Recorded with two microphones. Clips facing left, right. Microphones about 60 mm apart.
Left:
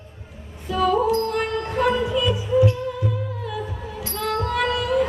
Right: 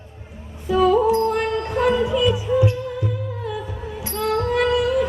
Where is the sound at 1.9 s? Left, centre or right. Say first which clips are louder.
Right 3 dB; right.